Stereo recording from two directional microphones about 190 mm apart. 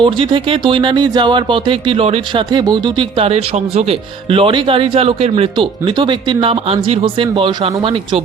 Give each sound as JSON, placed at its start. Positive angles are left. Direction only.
{"t": 0.0, "sound": "speech", "side_deg": -25}